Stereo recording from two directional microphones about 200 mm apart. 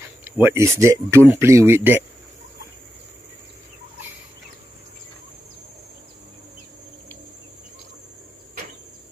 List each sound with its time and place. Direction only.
0.2 s speech: 10° right (ahead or behind)